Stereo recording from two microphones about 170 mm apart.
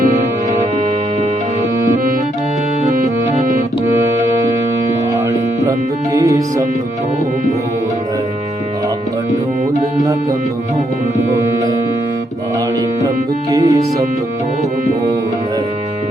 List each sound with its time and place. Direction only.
3.9 s music: 20° right (ahead or behind)
11.2 s music: 20° right (ahead or behind)
13.5 s music: 20° right (ahead or behind)